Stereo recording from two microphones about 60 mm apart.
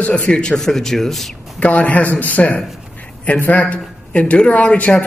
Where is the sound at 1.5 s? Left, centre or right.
Left.